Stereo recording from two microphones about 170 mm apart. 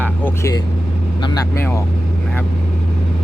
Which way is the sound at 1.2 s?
25° left (ahead or behind).